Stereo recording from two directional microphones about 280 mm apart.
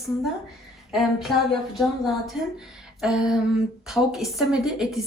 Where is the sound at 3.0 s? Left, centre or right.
Centre.